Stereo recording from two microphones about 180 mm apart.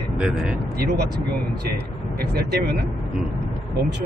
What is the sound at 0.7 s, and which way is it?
Speech, 65° right (ahead or behind).